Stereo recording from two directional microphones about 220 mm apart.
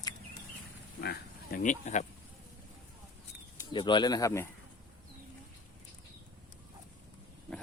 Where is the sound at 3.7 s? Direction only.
20° left (ahead or behind).